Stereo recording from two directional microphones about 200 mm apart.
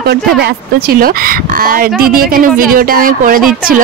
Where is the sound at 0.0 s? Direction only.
55° right (ahead or behind).